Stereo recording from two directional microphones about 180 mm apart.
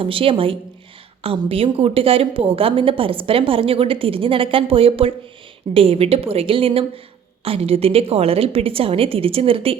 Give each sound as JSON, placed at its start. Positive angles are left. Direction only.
{"t": 0.0, "sound": "a woman's voice", "side_deg": -30}